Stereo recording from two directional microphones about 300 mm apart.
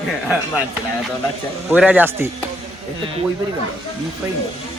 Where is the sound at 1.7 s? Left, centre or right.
Centre.